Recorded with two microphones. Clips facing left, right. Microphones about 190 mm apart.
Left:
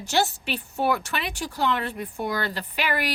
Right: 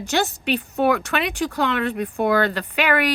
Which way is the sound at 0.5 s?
85° right.